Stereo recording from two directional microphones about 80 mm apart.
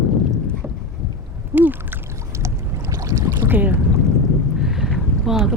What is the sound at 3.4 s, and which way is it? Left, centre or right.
Boat, right.